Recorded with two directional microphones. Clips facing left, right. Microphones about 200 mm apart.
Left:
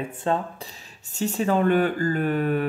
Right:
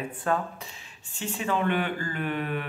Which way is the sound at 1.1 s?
40° left (ahead or behind).